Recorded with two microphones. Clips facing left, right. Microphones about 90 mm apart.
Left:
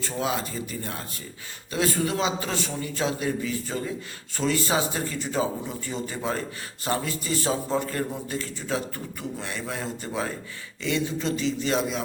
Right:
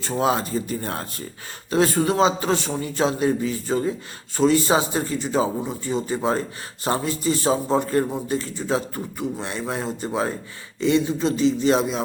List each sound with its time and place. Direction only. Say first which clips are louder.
0.0 s a man's voice: right 6 dB; 35° right (ahead or behind)